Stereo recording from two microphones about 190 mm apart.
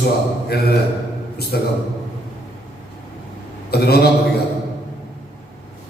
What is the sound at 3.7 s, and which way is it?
Speech, 55° left (ahead or behind).